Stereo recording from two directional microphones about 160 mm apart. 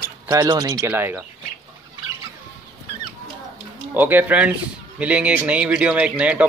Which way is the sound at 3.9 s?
10° right (ahead or behind).